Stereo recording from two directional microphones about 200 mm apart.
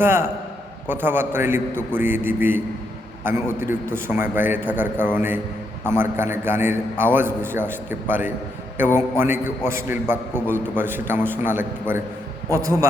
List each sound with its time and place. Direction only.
0.0 s a man's voice: 10° right (ahead or behind)